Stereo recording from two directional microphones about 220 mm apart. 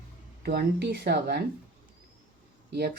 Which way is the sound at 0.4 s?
45° right (ahead or behind).